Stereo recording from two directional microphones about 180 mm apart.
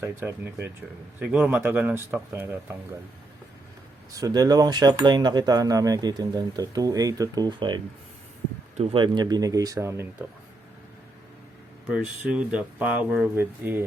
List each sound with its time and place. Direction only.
0.0 s speech: 15° right (ahead or behind)
4.1 s speech: 20° right (ahead or behind)
8.8 s speech: 30° right (ahead or behind)
11.9 s speech: 5° right (ahead or behind)